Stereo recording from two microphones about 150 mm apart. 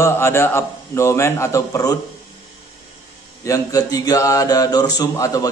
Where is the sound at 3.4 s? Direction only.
25° left (ahead or behind).